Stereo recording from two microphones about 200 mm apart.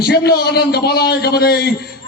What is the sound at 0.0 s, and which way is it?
A man's voice, 55° left (ahead or behind).